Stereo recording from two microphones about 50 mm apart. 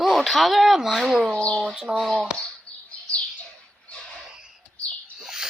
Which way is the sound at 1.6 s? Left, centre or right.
Centre.